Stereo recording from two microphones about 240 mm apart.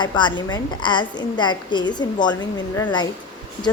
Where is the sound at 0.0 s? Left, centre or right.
Centre.